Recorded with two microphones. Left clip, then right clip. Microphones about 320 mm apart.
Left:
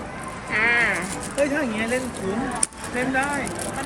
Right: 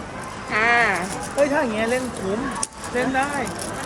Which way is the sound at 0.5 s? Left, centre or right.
Centre.